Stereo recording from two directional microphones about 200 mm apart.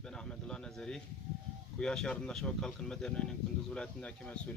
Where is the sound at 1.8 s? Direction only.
5° left (ahead or behind).